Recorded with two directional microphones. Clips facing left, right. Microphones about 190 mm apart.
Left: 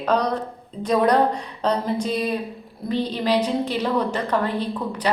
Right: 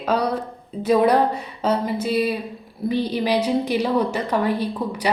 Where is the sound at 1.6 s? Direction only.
5° right (ahead or behind).